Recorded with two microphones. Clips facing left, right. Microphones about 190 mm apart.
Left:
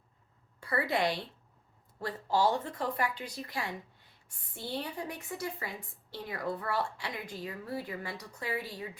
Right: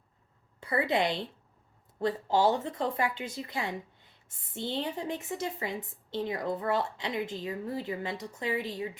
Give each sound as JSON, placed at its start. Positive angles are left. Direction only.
{"t": 0.6, "sound": "a woman's voice", "side_deg": -20}